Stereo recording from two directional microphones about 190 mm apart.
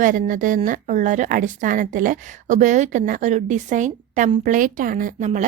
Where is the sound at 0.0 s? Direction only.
45° right (ahead or behind).